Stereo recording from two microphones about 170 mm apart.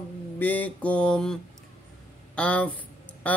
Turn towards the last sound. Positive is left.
turn(degrees=10)  # may be behind; listen again after turning